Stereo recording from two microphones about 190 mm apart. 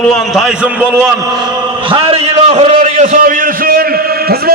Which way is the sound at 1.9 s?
35° right (ahead or behind).